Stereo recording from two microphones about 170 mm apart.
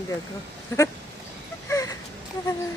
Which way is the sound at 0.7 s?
20° left (ahead or behind).